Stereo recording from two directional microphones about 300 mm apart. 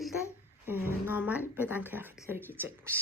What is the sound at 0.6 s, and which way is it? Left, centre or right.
Speech, centre.